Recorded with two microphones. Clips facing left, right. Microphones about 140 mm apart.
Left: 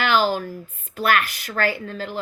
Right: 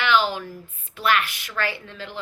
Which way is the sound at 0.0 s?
40° left (ahead or behind).